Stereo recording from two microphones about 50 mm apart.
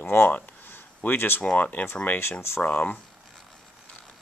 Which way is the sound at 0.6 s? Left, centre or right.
Left.